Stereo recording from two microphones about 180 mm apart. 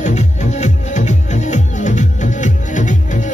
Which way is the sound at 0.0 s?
40° left (ahead or behind).